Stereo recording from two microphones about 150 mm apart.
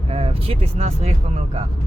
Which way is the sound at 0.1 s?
40° right (ahead or behind).